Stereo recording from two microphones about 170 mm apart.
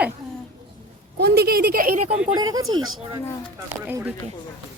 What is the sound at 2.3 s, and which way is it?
Speech, 20° right (ahead or behind).